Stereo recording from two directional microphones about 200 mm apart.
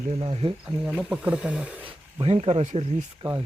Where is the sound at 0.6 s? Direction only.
5° right (ahead or behind).